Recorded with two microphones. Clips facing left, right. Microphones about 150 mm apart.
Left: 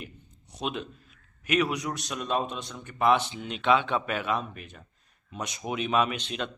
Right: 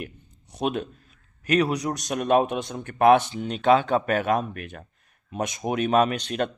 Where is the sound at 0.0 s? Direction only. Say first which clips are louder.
Right 6 dB; 50° right (ahead or behind).